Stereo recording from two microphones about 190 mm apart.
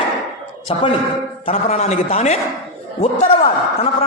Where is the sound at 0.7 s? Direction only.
30° left (ahead or behind).